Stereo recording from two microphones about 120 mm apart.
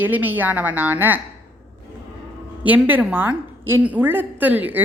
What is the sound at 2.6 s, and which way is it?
A woman's voice, 15° right (ahead or behind).